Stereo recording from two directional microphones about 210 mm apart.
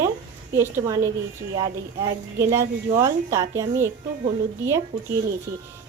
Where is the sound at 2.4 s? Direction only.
15° right (ahead or behind).